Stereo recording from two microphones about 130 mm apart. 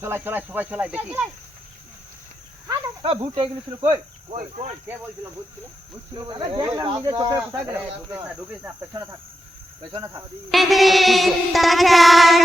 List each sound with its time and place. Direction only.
0.0 s speech: 20° right (ahead or behind)
3.0 s cricket: 40° right (ahead or behind)
6.1 s cricket: 35° right (ahead or behind)
7.7 s speech: 15° right (ahead or behind)
10.5 s child singing: centre (ahead or behind)